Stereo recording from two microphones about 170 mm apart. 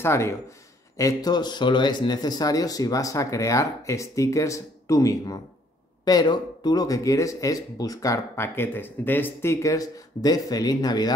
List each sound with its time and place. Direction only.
0.0 s speech: 15° left (ahead or behind)